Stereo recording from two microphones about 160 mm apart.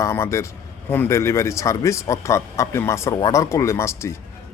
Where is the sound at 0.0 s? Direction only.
15° left (ahead or behind).